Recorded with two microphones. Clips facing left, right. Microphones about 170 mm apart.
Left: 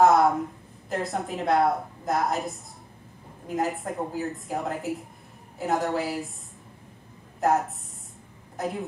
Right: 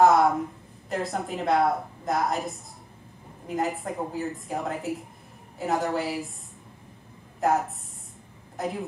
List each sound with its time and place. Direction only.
0.0 s a woman's voice: centre (ahead or behind)
7.3 s a woman's voice: centre (ahead or behind)